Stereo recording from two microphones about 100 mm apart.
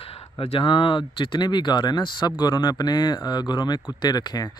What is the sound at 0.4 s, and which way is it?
Speech, 70° left (ahead or behind).